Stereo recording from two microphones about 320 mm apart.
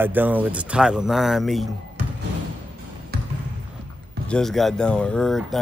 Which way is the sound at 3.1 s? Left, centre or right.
Right.